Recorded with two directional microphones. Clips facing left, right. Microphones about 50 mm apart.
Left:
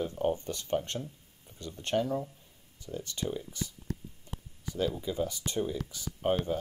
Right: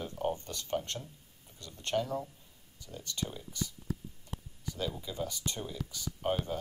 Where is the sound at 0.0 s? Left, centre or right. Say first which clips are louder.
Left 4 dB; centre.